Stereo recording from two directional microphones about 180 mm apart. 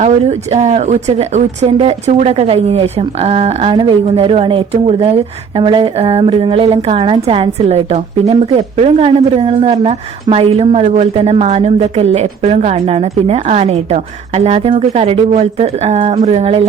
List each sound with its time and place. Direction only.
0.0 s speech: 40° right (ahead or behind)